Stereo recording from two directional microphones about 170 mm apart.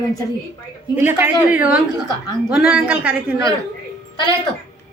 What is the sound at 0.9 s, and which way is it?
A woman's voice, 10° right (ahead or behind).